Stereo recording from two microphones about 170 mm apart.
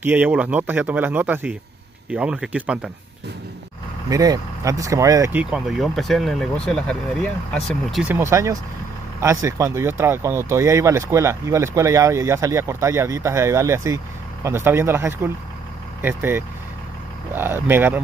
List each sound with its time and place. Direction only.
0.0 s speech: 10° right (ahead or behind)
4.1 s speech: 20° right (ahead or behind)
5.4 s speech: 5° right (ahead or behind)
8.1 s speech: 15° right (ahead or behind)